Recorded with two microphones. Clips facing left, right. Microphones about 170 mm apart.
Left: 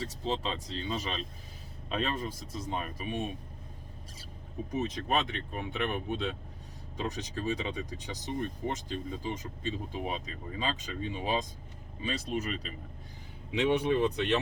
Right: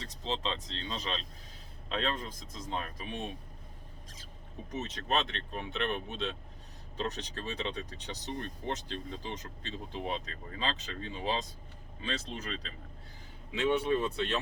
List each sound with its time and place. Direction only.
0.0 s speech: 10° left (ahead or behind)
4.7 s speech: 10° left (ahead or behind)